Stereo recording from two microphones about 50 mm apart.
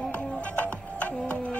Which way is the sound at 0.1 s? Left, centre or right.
Left.